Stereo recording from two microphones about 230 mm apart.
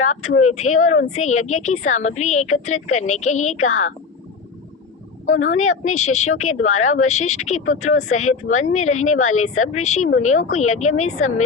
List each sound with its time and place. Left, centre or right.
0.3 s speech: left
5.3 s speech: left